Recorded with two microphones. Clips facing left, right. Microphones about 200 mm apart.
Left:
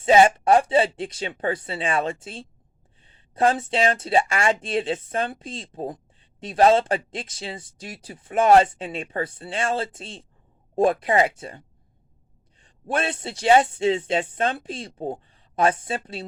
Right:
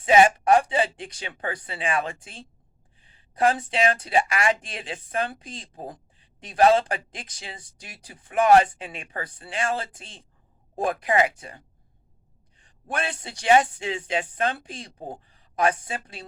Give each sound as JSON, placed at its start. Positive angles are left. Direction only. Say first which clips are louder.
{"t": 0.0, "sound": "speech", "louder": "left 2 dB", "side_deg": 25}